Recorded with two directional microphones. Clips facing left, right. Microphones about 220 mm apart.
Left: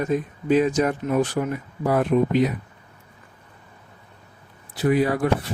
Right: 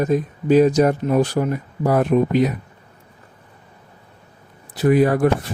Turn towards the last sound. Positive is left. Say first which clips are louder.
# right 5 dB
turn(degrees=-50)  # may be behind; listen again after turning